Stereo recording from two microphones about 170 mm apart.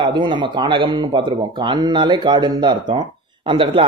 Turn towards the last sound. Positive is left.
turn(degrees=-30)  # may be behind; listen again after turning